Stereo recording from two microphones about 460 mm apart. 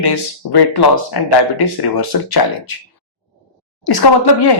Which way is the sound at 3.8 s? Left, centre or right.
Left.